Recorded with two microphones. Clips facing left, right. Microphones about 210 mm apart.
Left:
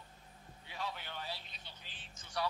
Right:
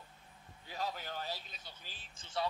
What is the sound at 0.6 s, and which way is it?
Music, 40° right (ahead or behind).